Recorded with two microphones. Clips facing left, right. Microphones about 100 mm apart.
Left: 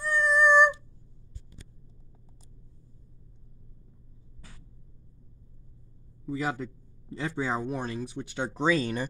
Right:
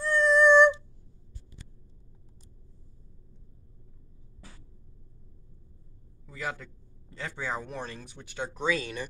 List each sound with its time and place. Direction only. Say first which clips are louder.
0.0 s cat: right 2 dB; 10° left (ahead or behind)
6.2 s a man's voice: left 6 dB; 20° left (ahead or behind)